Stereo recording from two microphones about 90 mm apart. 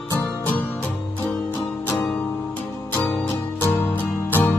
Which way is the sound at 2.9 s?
25° left (ahead or behind).